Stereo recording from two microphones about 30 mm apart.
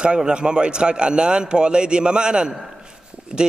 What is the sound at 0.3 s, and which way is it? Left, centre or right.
A man's voice, right.